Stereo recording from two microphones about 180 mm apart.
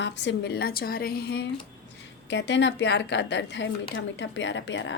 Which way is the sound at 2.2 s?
80° left.